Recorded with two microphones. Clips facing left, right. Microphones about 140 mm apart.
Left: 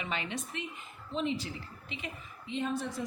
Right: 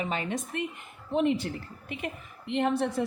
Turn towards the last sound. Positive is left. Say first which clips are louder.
# right 7 dB
turn(degrees=-65)  # may be behind; listen again after turning